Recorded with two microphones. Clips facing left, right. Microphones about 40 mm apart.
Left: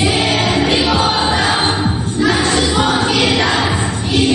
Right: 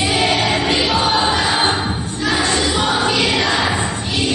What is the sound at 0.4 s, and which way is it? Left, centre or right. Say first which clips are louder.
Music: left 2 dB; left.